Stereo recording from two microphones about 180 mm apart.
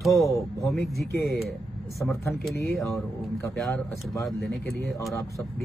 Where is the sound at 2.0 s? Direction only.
10° left (ahead or behind).